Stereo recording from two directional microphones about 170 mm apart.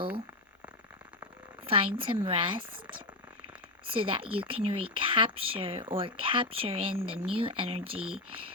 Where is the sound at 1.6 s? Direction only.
30° right (ahead or behind).